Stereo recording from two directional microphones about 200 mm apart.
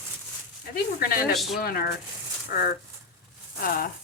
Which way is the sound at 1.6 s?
50° left (ahead or behind).